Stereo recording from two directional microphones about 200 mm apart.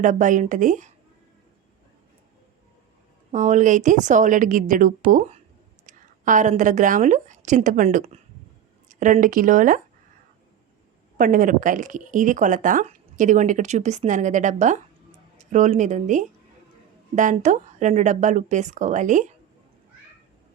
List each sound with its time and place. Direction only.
0.0 s speech: 40° right (ahead or behind)
3.3 s a woman's voice: 35° right (ahead or behind)
11.2 s speech: 40° right (ahead or behind)